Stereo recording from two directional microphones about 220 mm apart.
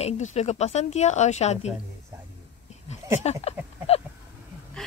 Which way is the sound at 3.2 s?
30° left (ahead or behind).